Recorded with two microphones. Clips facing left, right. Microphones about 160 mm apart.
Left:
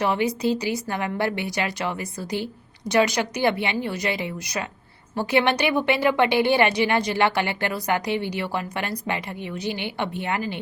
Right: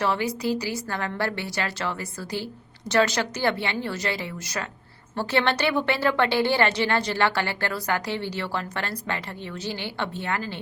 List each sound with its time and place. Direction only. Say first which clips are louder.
0.0 s a woman's voice: left 3 dB; 20° left (ahead or behind)